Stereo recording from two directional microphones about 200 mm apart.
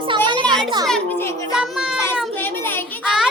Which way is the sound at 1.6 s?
Centre (ahead or behind).